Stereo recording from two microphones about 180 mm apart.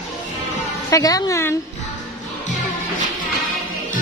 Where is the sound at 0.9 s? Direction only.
20° left (ahead or behind).